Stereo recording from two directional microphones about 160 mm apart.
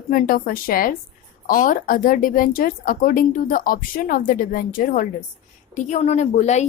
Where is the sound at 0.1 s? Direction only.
60° left (ahead or behind).